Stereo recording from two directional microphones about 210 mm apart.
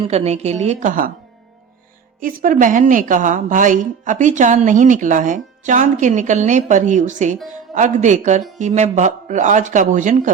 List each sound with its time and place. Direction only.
0.0 s a woman's voice: 30° right (ahead or behind)
2.2 s a woman's voice: 40° right (ahead or behind)